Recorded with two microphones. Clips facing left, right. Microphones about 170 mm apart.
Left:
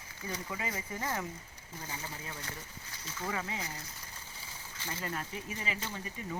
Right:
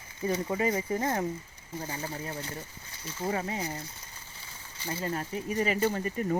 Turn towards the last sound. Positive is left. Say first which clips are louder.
# right 11 dB
turn(degrees=-55)  # may be behind; listen again after turning